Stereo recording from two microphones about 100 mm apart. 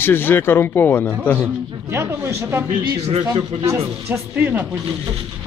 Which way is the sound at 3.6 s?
25° right (ahead or behind).